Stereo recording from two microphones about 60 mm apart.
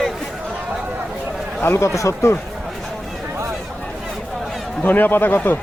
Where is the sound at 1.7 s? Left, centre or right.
Left.